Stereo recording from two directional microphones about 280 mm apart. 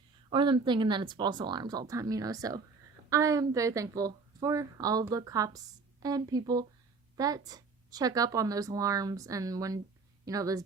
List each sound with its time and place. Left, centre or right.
0.3 s a woman's voice: centre